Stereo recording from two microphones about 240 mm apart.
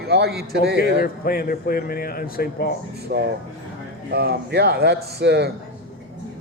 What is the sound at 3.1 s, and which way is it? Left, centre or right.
A man's voice, right.